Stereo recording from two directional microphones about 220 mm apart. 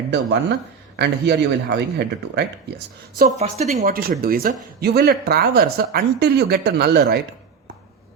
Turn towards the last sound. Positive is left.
turn(degrees=-45)  # may be behind; listen again after turning